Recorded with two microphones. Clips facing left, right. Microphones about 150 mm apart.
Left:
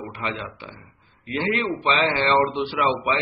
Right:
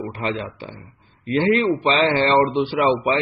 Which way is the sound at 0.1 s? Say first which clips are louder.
Right 5 dB; 35° right (ahead or behind).